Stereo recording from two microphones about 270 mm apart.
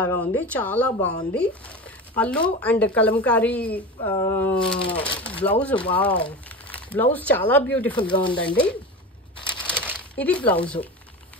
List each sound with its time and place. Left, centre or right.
0.0 s speech: centre
7.9 s speech: centre
8.4 s speech: centre
10.1 s speech: centre